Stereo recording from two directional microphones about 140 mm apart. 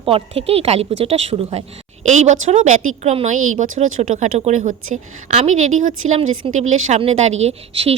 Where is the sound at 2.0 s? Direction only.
55° right (ahead or behind).